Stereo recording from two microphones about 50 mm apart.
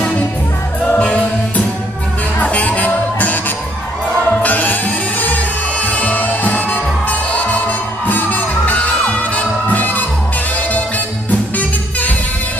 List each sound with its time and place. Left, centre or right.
0.9 s music: left
2.4 s music: left
11.2 s music: left